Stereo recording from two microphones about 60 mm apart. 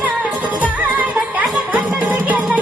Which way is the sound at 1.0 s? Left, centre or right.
Right.